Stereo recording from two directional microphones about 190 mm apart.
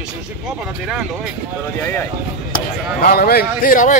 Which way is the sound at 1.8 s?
10° left (ahead or behind).